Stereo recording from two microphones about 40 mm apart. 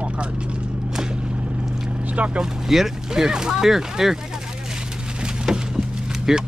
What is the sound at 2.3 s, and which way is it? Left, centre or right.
Speech, centre.